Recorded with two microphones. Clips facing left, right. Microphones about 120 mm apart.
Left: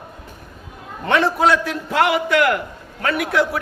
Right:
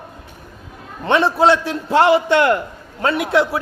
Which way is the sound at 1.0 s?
25° right (ahead or behind).